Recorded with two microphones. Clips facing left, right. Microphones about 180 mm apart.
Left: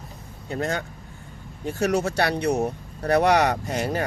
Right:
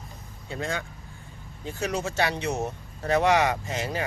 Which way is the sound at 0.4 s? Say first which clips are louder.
Left 5 dB; 45° left (ahead or behind).